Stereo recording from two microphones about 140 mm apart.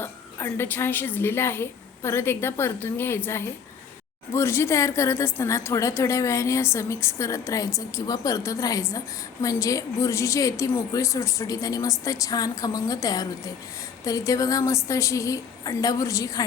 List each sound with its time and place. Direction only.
0.0 s a woman's voice: 15° left (ahead or behind)